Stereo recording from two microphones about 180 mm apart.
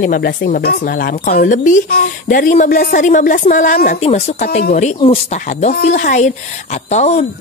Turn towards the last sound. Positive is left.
turn(degrees=40)  # may be behind; listen again after turning